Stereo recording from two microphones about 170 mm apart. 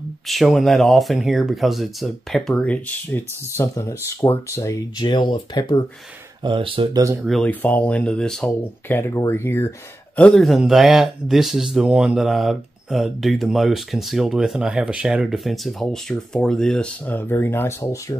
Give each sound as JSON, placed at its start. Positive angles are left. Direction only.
{"t": 0.3, "sound": "speech", "side_deg": 0}
{"t": 6.4, "sound": "speech", "side_deg": -30}
{"t": 7.2, "sound": "speech", "side_deg": 0}
{"t": 8.9, "sound": "speech", "side_deg": 15}